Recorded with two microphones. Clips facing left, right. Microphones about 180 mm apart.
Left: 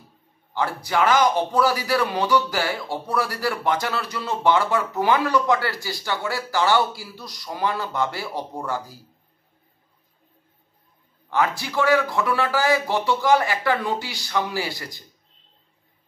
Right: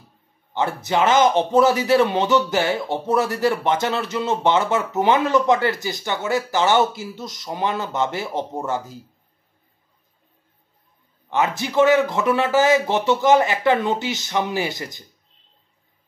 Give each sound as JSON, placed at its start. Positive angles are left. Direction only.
{"t": 0.5, "sound": "a man's voice", "side_deg": -20}
{"t": 11.2, "sound": "a man's voice", "side_deg": -20}